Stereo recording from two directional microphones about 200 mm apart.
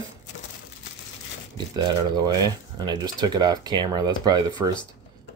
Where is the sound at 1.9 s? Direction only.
20° right (ahead or behind).